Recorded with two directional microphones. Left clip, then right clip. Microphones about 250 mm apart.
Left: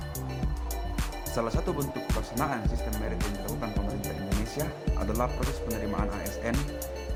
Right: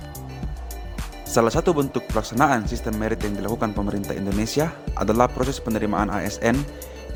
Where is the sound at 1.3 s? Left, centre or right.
Right.